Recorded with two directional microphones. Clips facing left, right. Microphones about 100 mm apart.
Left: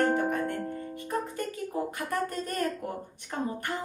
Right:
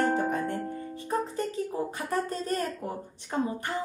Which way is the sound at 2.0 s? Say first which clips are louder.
Right 1 dB; 20° right (ahead or behind).